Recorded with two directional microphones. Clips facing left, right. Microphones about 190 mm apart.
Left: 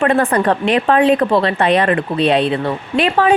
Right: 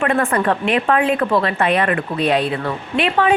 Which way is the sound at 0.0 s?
35° left (ahead or behind).